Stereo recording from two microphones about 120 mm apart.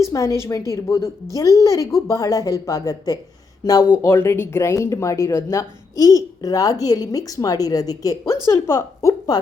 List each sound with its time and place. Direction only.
0.0 s a woman's voice: 25° left (ahead or behind)